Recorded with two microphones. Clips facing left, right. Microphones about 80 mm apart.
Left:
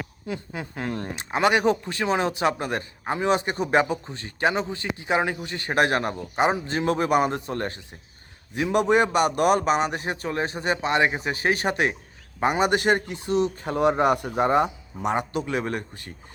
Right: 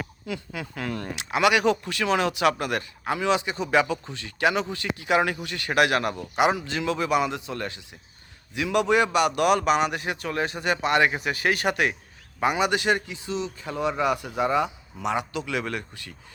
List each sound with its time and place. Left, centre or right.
0.3 s a man's voice: left